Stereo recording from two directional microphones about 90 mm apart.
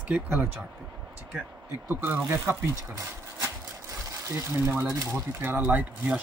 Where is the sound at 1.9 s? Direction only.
25° right (ahead or behind).